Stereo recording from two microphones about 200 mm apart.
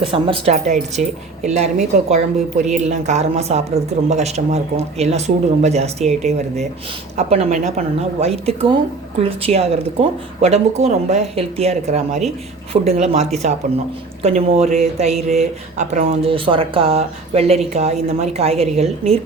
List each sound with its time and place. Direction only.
0.0 s speech: 25° right (ahead or behind)